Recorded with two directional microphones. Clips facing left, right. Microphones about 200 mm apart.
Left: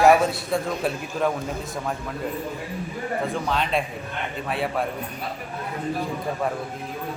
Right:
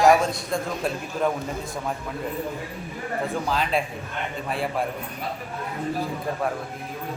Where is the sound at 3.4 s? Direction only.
Centre (ahead or behind).